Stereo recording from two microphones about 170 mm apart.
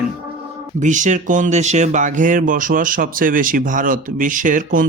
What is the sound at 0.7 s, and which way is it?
Speech, 45° right (ahead or behind).